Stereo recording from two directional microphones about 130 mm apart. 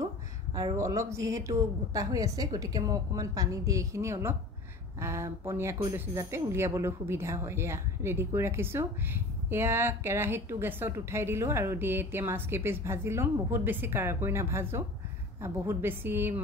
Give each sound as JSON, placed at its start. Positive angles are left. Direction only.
{"t": 0.7, "sound": "a woman's voice", "side_deg": -25}